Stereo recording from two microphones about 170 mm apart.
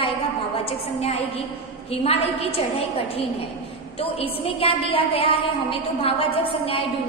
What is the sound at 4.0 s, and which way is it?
A woman's voice, 35° left (ahead or behind).